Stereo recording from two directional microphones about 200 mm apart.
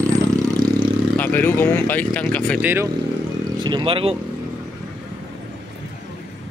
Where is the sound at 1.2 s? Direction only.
10° left (ahead or behind).